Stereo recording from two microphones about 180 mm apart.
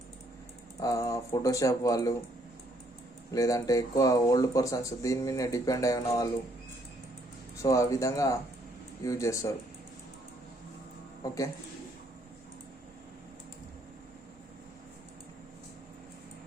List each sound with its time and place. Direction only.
0.8 s speech: 20° left (ahead or behind)
3.3 s speech: 20° left (ahead or behind)
7.5 s speech: 15° left (ahead or behind)